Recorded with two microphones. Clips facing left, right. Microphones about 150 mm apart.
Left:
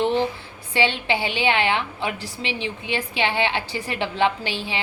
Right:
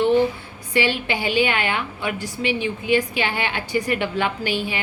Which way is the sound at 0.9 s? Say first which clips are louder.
Right 1 dB; 25° left (ahead or behind).